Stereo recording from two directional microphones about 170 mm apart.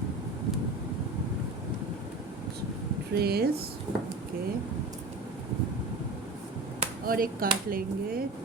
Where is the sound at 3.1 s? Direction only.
65° right (ahead or behind).